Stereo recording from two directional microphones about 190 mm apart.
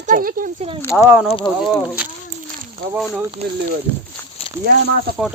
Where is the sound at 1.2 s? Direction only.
30° left (ahead or behind).